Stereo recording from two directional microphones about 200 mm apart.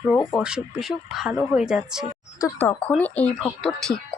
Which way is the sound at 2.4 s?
15° left (ahead or behind).